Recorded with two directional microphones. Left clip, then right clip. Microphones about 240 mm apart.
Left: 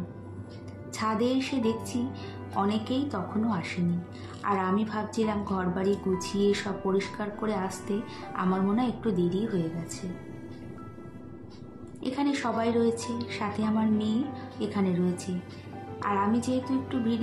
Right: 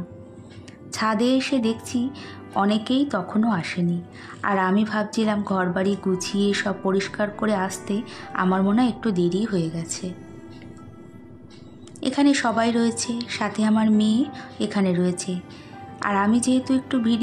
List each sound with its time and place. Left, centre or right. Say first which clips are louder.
0.9 s a woman's voice: right 6 dB; right
12.0 s a woman's voice: right 9 dB; right